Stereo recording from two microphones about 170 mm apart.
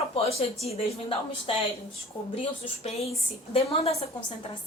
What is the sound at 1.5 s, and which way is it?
A woman's voice, 30° left (ahead or behind).